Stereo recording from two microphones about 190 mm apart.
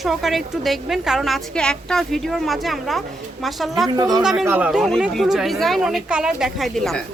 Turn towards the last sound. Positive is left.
turn(degrees=0)  # may be behind; listen again after turning